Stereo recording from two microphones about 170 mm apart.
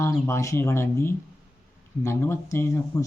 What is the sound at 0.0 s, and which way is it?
Speech, 15° left (ahead or behind).